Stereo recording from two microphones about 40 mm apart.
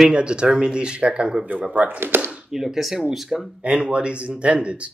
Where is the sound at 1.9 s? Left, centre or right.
Right.